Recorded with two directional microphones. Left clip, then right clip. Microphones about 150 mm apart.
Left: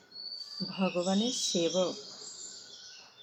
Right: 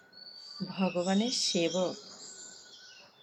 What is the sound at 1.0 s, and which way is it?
Speech, 5° right (ahead or behind).